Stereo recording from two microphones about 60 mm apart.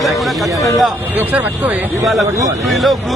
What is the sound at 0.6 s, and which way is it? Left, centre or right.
Speech, left.